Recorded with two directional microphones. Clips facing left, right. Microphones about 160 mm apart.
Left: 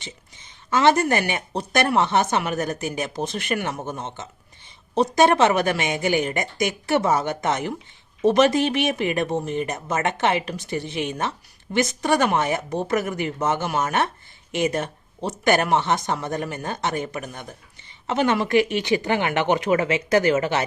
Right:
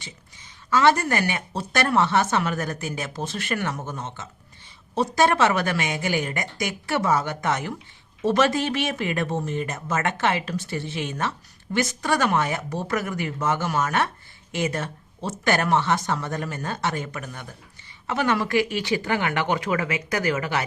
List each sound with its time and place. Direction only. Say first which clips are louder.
0.0 s speech: left 3 dB; 20° left (ahead or behind)